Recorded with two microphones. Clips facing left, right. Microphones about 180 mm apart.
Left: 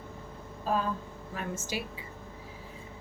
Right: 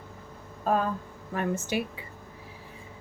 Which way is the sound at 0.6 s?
55° right (ahead or behind).